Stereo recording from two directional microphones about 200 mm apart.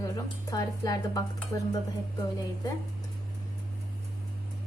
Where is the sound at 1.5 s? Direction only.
20° left (ahead or behind).